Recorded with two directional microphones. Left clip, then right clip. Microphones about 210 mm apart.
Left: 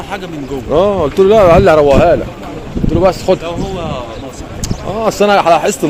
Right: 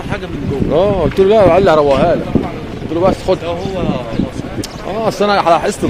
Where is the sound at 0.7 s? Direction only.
20° left (ahead or behind).